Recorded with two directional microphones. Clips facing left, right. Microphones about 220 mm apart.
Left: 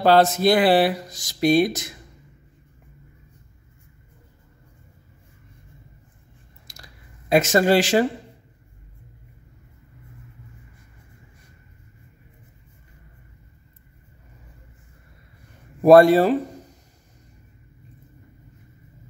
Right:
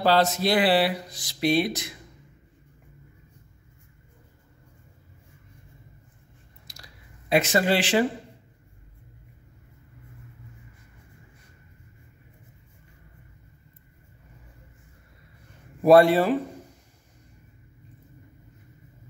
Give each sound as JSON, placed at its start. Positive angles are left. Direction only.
{"t": 0.0, "sound": "speech", "side_deg": 55}
{"t": 6.7, "sound": "a sound", "side_deg": 50}
{"t": 15.8, "sound": "speech", "side_deg": 45}